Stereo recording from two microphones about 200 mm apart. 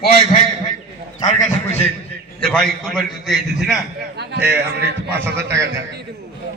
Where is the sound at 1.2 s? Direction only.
35° left (ahead or behind).